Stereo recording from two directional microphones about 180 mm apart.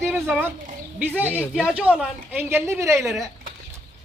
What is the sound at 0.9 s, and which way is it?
Speech, 10° right (ahead or behind).